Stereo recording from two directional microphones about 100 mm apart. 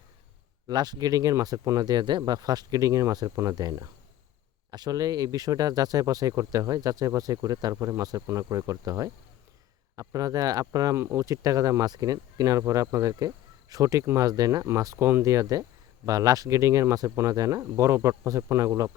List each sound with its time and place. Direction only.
0.7 s speech: 45° right (ahead or behind)